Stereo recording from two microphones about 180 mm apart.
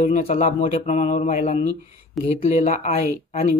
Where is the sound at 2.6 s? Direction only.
50° left (ahead or behind).